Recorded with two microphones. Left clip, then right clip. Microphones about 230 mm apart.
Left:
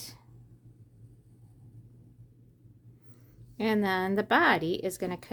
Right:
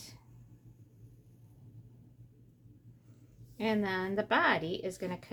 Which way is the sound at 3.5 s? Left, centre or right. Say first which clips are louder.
Left 5 dB; left.